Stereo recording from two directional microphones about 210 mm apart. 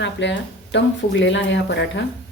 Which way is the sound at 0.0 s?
55° left (ahead or behind).